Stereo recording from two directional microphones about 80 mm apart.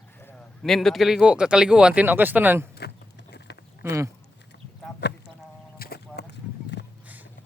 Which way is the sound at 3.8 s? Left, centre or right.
Right.